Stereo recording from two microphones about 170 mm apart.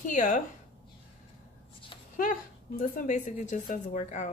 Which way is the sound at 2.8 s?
50° left (ahead or behind).